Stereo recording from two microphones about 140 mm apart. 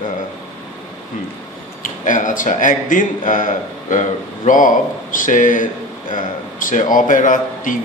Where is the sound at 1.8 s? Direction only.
70° left (ahead or behind).